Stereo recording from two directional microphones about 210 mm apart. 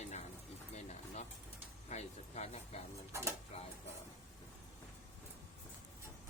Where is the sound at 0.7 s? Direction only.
30° left (ahead or behind).